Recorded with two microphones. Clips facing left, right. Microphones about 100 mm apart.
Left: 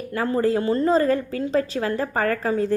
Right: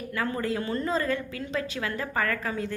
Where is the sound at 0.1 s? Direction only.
30° left (ahead or behind).